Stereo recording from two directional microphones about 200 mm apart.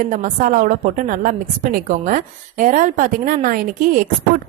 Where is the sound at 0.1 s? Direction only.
40° right (ahead or behind).